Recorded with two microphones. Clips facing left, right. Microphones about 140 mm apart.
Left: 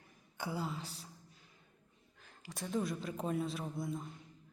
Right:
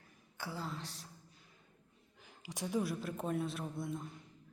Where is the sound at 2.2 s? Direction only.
15° right (ahead or behind).